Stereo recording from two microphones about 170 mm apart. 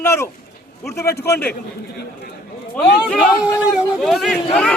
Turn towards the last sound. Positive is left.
turn(degrees=0)  # may be behind; listen again after turning